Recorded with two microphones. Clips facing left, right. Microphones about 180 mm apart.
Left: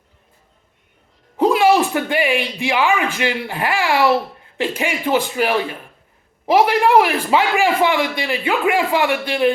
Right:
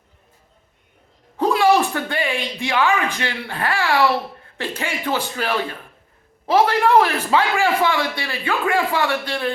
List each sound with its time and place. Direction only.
1.4 s a man's voice: 15° left (ahead or behind)